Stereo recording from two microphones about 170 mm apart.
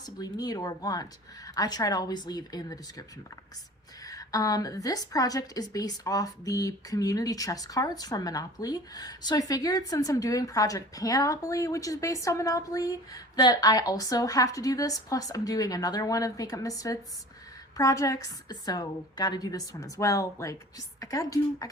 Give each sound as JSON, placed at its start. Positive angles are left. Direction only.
{"t": 0.0, "sound": "a woman's voice", "side_deg": 20}
{"t": 4.0, "sound": "a woman's voice", "side_deg": 20}